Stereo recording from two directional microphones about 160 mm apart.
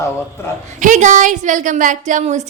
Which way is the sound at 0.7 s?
50° right (ahead or behind).